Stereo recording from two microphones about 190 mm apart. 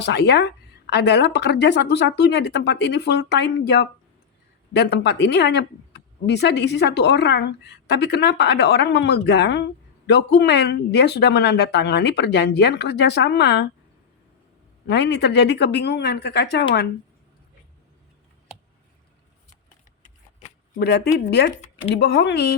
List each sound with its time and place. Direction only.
0.0 s speech: 65° left (ahead or behind)
14.8 s speech: 65° left (ahead or behind)
20.7 s speech: 60° left (ahead or behind)